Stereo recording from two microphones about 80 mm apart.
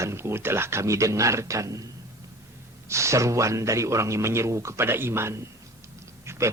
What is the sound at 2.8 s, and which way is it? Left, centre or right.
Speech, right.